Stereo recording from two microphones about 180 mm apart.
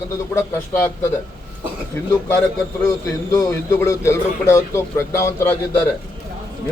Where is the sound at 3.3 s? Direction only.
20° left (ahead or behind).